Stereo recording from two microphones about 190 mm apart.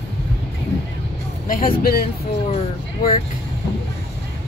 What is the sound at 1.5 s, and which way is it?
Speech, 50° left (ahead or behind).